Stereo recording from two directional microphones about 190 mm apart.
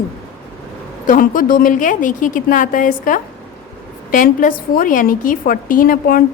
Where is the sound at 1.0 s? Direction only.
45° left (ahead or behind).